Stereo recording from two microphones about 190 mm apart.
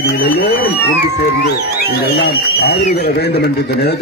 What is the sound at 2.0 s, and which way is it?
A man's voice, 60° left (ahead or behind).